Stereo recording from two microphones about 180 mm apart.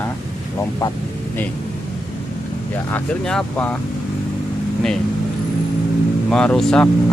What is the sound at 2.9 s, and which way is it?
Speech, 5° left (ahead or behind).